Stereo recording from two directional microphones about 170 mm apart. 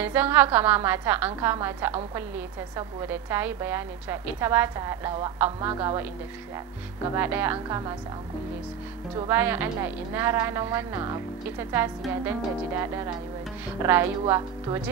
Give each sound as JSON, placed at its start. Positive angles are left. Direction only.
{"t": 0.0, "sound": "a woman's voice", "side_deg": -10}
{"t": 3.0, "sound": "a woman's voice", "side_deg": -15}
{"t": 7.2, "sound": "a woman's voice", "side_deg": -10}
{"t": 9.3, "sound": "a woman's voice", "side_deg": -10}